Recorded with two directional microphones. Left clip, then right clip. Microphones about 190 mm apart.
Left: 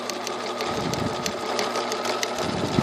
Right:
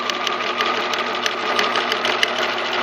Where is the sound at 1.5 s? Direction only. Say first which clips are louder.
Right 6 dB; 10° left (ahead or behind).